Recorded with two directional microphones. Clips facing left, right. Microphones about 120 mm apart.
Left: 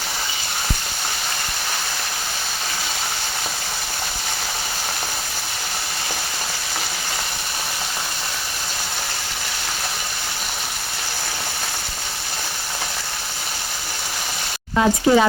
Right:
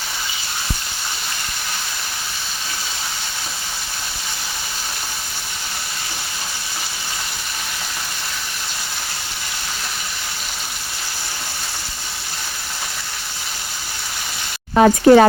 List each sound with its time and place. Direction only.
14.8 s speech: 55° right (ahead or behind)